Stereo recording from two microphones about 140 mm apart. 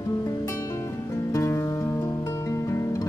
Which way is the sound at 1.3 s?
20° left (ahead or behind).